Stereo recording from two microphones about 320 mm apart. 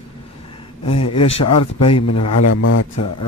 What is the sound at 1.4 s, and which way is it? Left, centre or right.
A man's voice, left.